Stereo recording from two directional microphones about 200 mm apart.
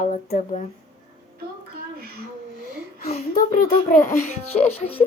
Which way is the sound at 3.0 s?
40° left (ahead or behind).